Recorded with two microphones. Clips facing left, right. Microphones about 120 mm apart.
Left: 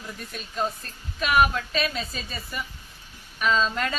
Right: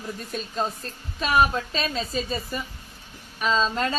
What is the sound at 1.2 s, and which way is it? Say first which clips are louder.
A woman's voice: even; 30° right (ahead or behind).